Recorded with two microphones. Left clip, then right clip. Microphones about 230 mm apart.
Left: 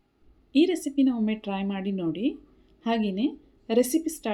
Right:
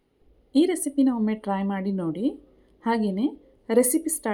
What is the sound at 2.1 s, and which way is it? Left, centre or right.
A woman's voice, right.